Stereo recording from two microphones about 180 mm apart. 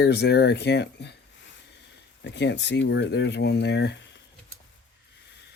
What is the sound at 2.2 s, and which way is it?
Speech, 75° left (ahead or behind).